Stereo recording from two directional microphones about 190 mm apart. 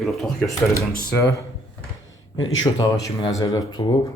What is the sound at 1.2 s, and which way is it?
Speech, 15° left (ahead or behind).